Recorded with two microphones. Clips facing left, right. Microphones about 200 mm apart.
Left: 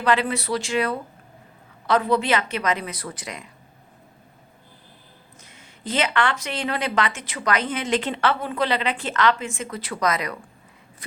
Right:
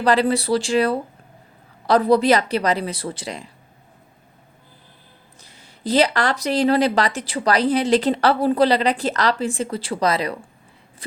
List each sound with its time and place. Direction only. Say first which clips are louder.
0.0 s speech: right 4 dB; 35° right (ahead or behind)
5.4 s speech: right 7 dB; 35° right (ahead or behind)